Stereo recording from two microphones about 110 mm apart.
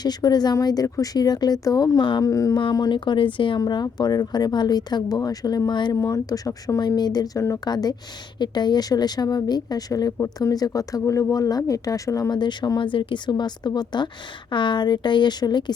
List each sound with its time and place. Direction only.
0.0 s a woman's voice: 40° left (ahead or behind)
2.3 s a woman's voice: 30° left (ahead or behind)
12.3 s speech: 45° left (ahead or behind)